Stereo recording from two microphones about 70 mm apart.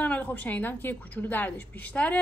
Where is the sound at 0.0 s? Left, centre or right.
Left.